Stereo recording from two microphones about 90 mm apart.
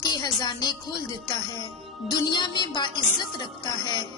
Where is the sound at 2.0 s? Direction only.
50° left (ahead or behind).